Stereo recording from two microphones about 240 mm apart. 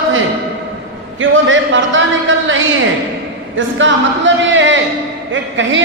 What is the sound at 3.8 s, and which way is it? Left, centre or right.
A woman's voice, right.